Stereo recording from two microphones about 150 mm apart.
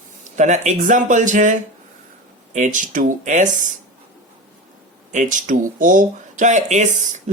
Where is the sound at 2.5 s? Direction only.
55° right (ahead or behind).